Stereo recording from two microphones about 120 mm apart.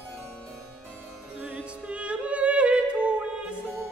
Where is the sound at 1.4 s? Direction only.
10° right (ahead or behind).